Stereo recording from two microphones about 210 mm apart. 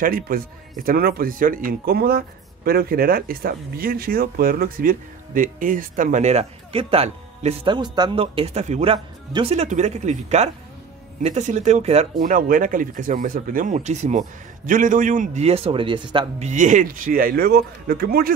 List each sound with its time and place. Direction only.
0.0 s speech: 40° right (ahead or behind)